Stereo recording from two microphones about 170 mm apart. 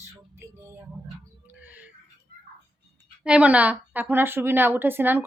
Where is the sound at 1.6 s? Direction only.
10° right (ahead or behind).